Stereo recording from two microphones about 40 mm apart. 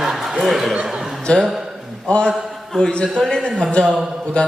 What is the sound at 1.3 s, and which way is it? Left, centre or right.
A man's voice, left.